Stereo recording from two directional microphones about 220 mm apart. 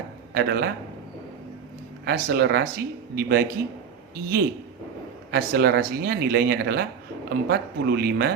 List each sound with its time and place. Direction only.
0.3 s speech: 45° right (ahead or behind)
2.0 s speech: 45° right (ahead or behind)